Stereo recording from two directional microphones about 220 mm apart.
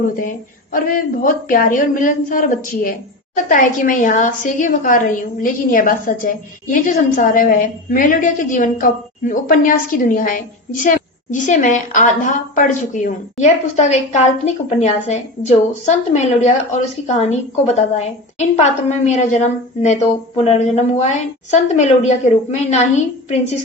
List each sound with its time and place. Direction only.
0.2 s a woman's voice: 40° left (ahead or behind)